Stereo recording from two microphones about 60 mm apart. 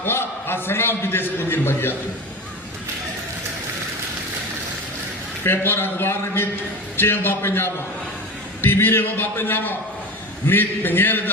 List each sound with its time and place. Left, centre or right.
0.0 s a man's voice: left
5.4 s a man's voice: left